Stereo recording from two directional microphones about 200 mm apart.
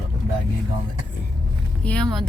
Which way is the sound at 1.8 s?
5° left (ahead or behind).